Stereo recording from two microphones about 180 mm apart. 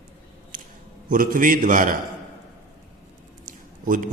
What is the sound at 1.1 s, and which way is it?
Speech, 50° right (ahead or behind).